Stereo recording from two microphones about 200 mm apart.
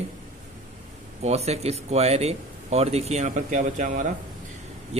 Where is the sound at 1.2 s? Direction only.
30° right (ahead or behind).